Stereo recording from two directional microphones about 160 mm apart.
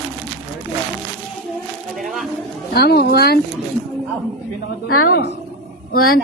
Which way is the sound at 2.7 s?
80° left.